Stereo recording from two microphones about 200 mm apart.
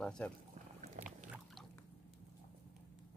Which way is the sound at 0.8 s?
35° right (ahead or behind).